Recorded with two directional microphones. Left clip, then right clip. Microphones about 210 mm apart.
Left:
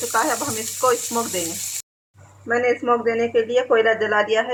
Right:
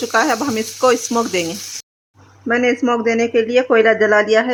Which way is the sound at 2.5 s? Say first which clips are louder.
Right 3 dB; 55° right (ahead or behind).